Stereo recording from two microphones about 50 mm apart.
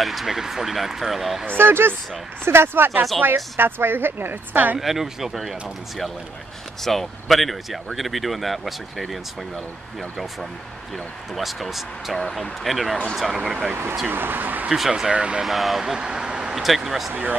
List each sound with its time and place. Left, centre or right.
0.0 s speech: centre
1.5 s speech: right
4.7 s speech: centre
11.3 s speech: centre
14.0 s speech: right
14.9 s speech: centre
15.4 s speech: centre
15.8 s a sound: centre
16.6 s speech: centre
17.1 s speech: right